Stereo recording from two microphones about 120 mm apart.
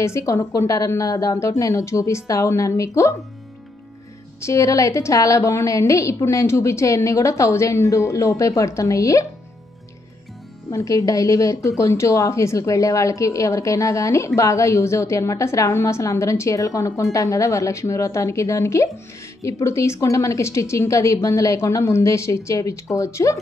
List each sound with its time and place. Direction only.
0.0 s a woman's voice: 25° left (ahead or behind)
4.4 s a woman's voice: 25° left (ahead or behind)
10.7 s a woman's voice: 25° left (ahead or behind)